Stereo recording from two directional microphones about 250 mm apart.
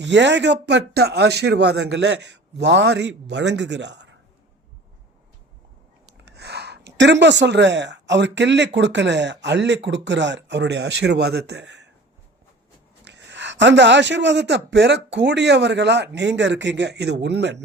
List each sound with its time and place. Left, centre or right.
0.0 s a man's voice: right
6.1 s a woman's voice: right
13.1 s a man's voice: right